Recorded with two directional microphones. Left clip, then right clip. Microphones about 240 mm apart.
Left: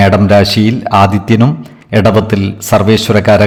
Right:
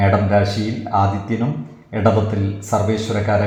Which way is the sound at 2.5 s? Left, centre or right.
Left.